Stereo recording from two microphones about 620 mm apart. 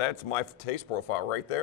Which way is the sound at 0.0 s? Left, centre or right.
Left.